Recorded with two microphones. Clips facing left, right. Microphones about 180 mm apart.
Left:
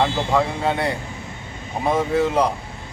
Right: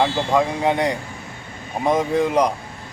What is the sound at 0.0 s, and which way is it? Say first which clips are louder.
Speech: right 1 dB; 15° right (ahead or behind).